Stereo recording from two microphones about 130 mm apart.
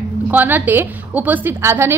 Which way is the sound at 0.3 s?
15° right (ahead or behind).